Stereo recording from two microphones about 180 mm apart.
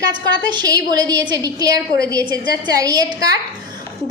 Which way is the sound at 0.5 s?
20° right (ahead or behind).